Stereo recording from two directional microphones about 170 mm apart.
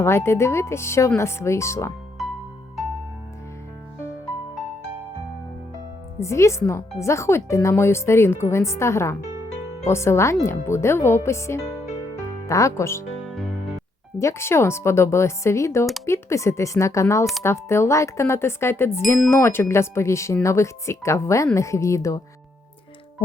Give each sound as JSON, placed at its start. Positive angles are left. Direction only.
{"t": 0.0, "sound": "speech", "side_deg": 15}
{"t": 2.2, "sound": "music", "side_deg": 0}
{"t": 6.1, "sound": "speech", "side_deg": 15}
{"t": 14.2, "sound": "speech", "side_deg": 15}